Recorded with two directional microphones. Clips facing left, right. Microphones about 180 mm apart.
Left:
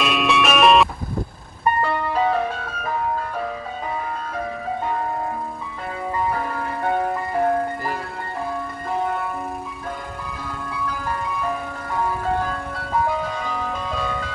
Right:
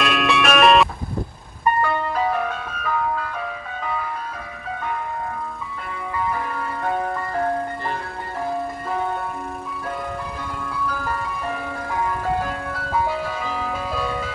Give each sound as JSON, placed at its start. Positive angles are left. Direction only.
{"t": 0.0, "sound": "music", "side_deg": 0}
{"t": 1.8, "sound": "music", "side_deg": 30}
{"t": 6.1, "sound": "music", "side_deg": 25}
{"t": 12.7, "sound": "music", "side_deg": 0}